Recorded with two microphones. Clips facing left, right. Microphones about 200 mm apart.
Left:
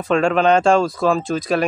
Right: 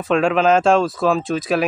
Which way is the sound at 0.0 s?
Centre (ahead or behind).